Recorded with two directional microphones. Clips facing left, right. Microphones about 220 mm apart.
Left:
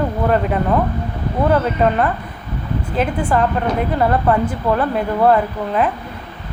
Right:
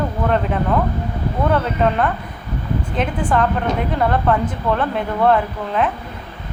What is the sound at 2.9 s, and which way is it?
Speech, 5° left (ahead or behind).